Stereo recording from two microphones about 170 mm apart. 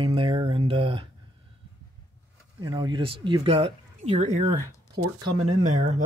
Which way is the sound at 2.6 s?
25° right (ahead or behind).